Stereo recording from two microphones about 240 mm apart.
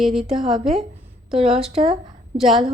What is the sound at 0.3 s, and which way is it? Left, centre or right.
A woman's voice, right.